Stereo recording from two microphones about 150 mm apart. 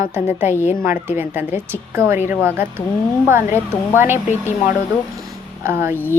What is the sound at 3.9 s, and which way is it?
A woman's voice, 15° right (ahead or behind).